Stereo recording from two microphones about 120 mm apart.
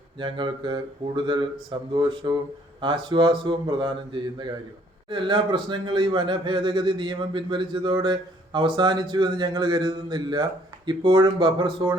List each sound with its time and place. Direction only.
0.2 s a man's voice: 40° right (ahead or behind)